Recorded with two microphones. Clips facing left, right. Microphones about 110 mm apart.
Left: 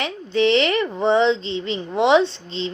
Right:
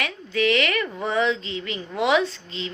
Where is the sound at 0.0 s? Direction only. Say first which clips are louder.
Left 4 dB; 25° left (ahead or behind).